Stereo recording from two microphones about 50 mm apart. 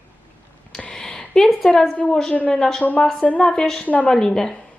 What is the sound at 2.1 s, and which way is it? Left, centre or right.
Speech, centre.